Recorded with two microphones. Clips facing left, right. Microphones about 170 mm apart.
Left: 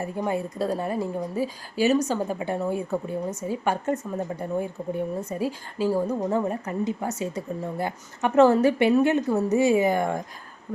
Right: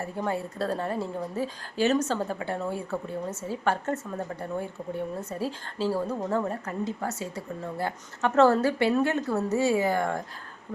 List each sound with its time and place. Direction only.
0.0 s a woman's voice: 15° left (ahead or behind)